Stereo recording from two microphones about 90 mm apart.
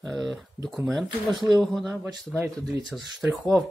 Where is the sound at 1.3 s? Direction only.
55° right (ahead or behind).